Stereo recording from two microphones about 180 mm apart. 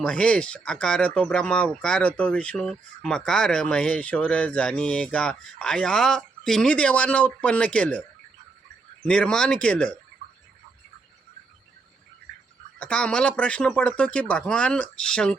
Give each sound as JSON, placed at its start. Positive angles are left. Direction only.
{"t": 0.0, "sound": "speech", "side_deg": 5}
{"t": 9.0, "sound": "speech", "side_deg": 5}
{"t": 12.8, "sound": "speech", "side_deg": 5}